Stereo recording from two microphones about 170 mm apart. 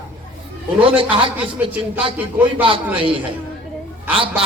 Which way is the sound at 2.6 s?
30° right (ahead or behind).